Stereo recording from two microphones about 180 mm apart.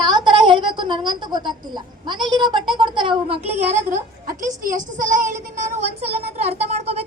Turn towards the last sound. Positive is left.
turn(degrees=-35)  # may be behind; listen again after turning